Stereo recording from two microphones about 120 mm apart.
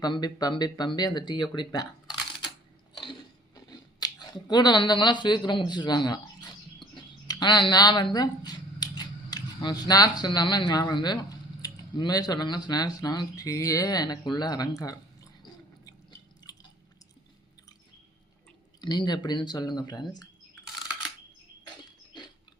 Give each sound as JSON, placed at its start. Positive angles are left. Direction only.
{"t": 0.0, "sound": "speech", "side_deg": 35}
{"t": 2.9, "sound": "chewing", "side_deg": 40}
{"t": 6.9, "sound": "speech", "side_deg": 40}
{"t": 16.5, "sound": "drip", "side_deg": 30}
{"t": 18.8, "sound": "speech", "side_deg": 35}